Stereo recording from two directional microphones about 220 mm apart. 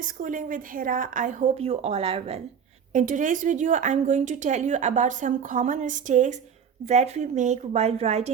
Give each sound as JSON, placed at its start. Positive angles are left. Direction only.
{"t": 0.0, "sound": "a woman's voice", "side_deg": -35}